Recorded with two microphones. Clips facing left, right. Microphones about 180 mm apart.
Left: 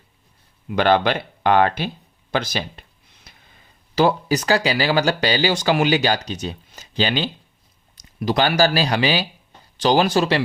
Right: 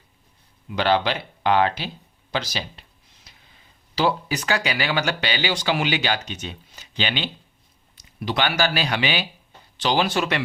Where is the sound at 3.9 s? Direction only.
45° left (ahead or behind).